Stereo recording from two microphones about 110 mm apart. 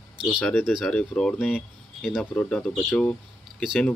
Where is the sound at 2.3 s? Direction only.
10° left (ahead or behind).